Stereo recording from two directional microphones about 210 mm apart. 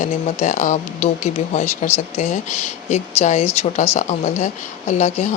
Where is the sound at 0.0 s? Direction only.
35° left (ahead or behind).